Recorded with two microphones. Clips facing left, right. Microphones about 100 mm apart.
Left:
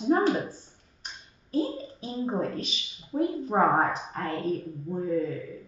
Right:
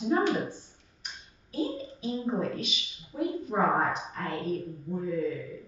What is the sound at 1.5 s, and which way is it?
A woman's voice, 35° left (ahead or behind).